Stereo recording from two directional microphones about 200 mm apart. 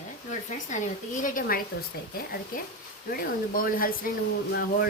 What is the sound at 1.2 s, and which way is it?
Speech, 40° left (ahead or behind).